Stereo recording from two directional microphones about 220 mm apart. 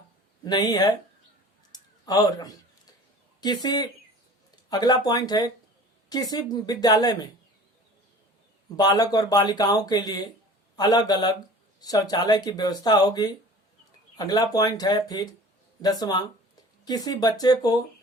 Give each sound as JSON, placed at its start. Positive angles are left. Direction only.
{"t": 0.4, "sound": "speech", "side_deg": 20}
{"t": 1.7, "sound": "a sound", "side_deg": 15}
{"t": 3.4, "sound": "speech", "side_deg": 20}
{"t": 8.7, "sound": "speech", "side_deg": 15}